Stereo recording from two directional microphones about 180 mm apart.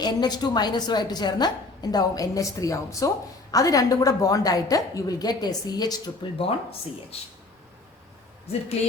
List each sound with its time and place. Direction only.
0.0 s speech: 25° left (ahead or behind)
6.4 s speech: 35° left (ahead or behind)
8.8 s speech: 35° left (ahead or behind)